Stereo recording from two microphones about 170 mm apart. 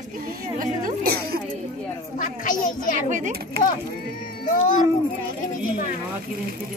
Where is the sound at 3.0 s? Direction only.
45° right (ahead or behind).